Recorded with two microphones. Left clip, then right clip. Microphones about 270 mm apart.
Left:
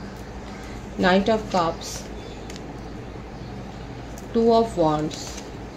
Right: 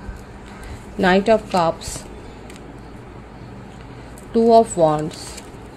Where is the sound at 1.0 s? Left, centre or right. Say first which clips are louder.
Right 4 dB; right.